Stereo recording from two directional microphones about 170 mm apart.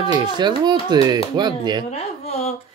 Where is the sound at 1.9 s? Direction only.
35° left (ahead or behind).